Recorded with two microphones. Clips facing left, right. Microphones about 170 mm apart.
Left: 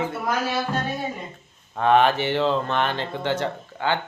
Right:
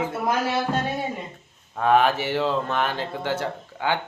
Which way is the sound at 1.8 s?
5° right (ahead or behind).